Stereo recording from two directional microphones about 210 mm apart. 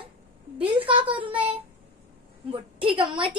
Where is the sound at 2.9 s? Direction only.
25° right (ahead or behind).